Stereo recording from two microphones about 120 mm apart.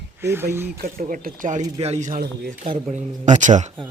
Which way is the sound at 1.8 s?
75° right (ahead or behind).